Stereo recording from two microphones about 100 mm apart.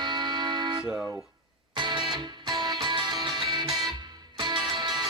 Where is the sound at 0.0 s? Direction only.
50° right (ahead or behind).